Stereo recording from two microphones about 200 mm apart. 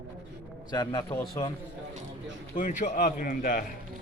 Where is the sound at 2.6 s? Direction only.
40° left (ahead or behind).